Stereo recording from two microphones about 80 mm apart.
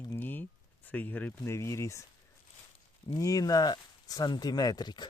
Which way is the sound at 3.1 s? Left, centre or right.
Left.